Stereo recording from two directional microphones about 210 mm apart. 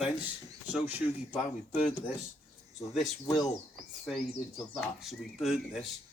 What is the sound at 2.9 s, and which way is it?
Speech, centre (ahead or behind).